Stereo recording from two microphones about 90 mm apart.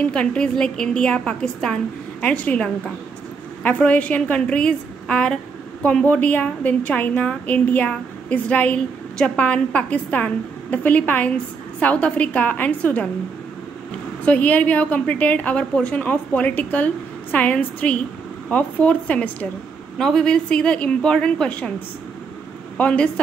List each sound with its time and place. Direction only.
0.0 s a woman's voice: 15° left (ahead or behind)
14.2 s a woman's voice: 20° left (ahead or behind)
22.8 s a woman's voice: 15° left (ahead or behind)